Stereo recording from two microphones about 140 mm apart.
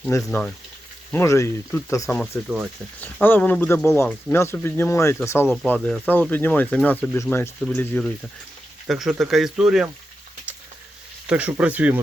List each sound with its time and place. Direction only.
0.3 s speech: 10° left (ahead or behind)
1.1 s speech: 20° left (ahead or behind)
2.0 s speech: 10° left (ahead or behind)
8.9 s speech: centre (ahead or behind)
11.3 s speech: 10° right (ahead or behind)